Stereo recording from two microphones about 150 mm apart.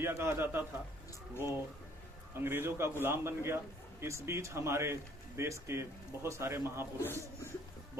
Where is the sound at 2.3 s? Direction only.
15° right (ahead or behind).